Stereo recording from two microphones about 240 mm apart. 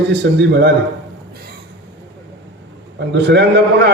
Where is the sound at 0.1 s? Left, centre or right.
Right.